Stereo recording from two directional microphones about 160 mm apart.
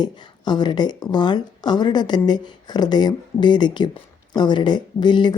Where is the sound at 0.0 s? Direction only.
25° left (ahead or behind).